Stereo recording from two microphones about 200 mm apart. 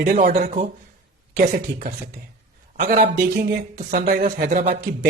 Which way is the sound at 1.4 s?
45° right (ahead or behind).